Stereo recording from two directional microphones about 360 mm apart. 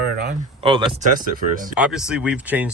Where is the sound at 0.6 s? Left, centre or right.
Centre.